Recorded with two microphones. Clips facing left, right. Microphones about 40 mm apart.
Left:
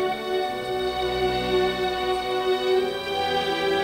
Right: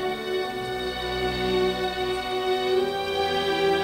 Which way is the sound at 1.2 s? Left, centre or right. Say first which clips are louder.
Even; centre.